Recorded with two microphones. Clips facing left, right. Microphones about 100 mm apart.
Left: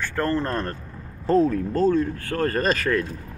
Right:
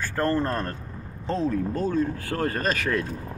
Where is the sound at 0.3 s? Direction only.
15° right (ahead or behind).